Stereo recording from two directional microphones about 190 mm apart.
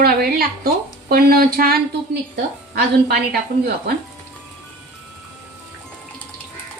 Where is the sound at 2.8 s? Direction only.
60° right (ahead or behind).